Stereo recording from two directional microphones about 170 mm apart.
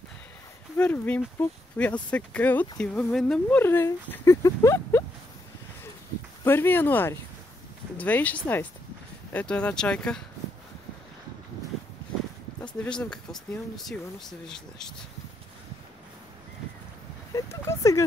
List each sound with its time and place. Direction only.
0.7 s speech: 10° left (ahead or behind)
6.4 s speech: 15° left (ahead or behind)
12.5 s speech: 5° left (ahead or behind)
17.3 s a sound: 15° left (ahead or behind)